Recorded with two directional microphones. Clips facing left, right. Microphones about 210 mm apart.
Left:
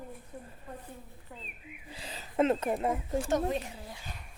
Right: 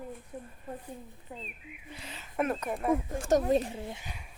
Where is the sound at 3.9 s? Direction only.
20° right (ahead or behind).